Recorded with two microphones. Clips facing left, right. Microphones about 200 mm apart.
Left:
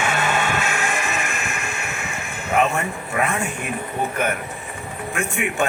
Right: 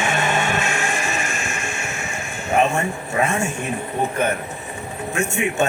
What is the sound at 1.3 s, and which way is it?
Music, 35° left (ahead or behind).